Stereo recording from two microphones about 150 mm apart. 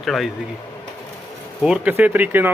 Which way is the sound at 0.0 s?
Centre (ahead or behind).